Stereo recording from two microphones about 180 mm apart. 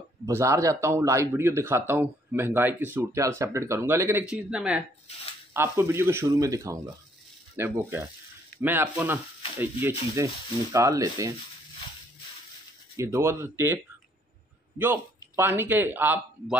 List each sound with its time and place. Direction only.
0.3 s speech: 15° right (ahead or behind)
12.9 s speech: 15° right (ahead or behind)
14.8 s speech: 10° right (ahead or behind)